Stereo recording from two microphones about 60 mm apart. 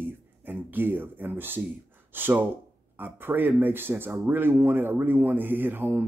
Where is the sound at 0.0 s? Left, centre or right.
Right.